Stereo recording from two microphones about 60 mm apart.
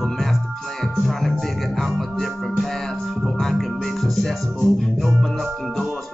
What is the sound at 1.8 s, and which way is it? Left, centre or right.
Music, centre.